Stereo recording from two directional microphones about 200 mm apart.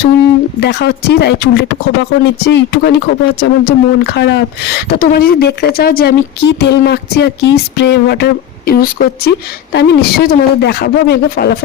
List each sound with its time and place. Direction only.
0.6 s speech: 55° left (ahead or behind)